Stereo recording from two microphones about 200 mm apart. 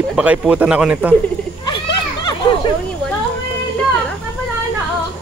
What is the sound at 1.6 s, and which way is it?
Children playing, 25° left (ahead or behind).